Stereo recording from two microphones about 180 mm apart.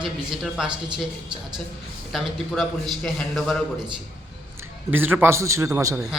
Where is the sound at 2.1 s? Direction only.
Centre (ahead or behind).